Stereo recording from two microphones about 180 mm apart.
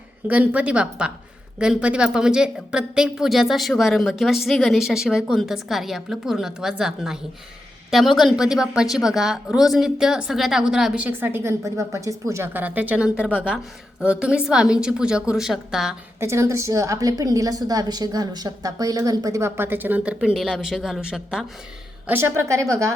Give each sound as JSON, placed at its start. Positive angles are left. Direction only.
{"t": 0.3, "sound": "a woman's voice", "side_deg": -10}
{"t": 16.2, "sound": "a woman's voice", "side_deg": -15}